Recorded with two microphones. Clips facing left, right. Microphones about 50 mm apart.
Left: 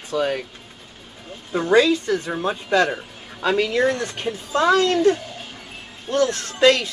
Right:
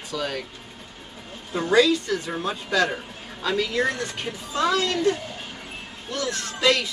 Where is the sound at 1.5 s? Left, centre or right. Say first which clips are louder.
Left 3 dB; left.